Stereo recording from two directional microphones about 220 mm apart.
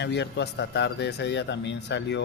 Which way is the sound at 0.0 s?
50° left (ahead or behind).